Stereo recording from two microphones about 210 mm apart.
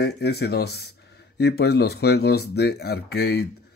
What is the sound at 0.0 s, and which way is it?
Speech, 50° left (ahead or behind).